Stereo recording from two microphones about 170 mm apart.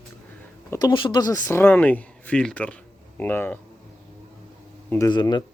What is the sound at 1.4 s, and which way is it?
Speech, 10° left (ahead or behind).